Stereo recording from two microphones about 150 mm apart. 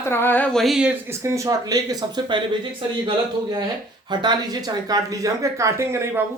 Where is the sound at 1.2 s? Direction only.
20° right (ahead or behind).